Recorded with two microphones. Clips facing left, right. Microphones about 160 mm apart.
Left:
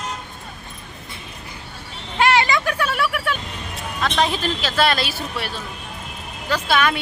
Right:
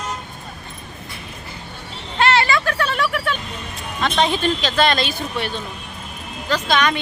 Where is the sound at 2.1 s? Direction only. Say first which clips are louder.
Even; 10° left (ahead or behind).